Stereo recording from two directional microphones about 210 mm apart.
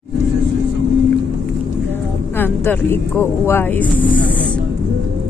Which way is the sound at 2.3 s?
10° left (ahead or behind).